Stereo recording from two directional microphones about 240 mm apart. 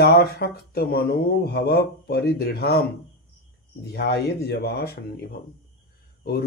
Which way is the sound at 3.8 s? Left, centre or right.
Left.